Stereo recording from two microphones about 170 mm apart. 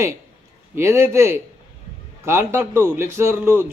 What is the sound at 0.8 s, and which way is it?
A man's voice, 15° right (ahead or behind).